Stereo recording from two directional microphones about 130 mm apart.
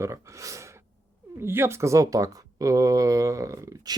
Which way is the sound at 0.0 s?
25° right (ahead or behind).